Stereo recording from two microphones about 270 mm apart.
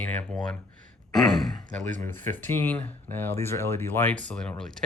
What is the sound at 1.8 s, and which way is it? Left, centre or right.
Speech, right.